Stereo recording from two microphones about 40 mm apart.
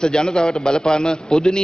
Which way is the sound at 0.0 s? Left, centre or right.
Centre.